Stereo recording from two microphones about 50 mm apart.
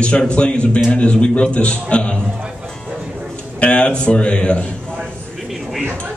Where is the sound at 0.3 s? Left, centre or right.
Left.